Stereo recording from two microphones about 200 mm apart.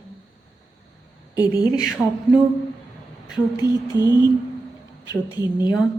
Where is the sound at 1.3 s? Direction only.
20° left (ahead or behind).